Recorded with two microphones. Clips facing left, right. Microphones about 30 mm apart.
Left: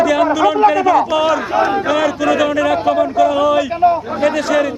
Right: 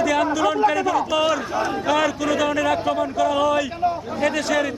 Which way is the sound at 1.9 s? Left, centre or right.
Centre.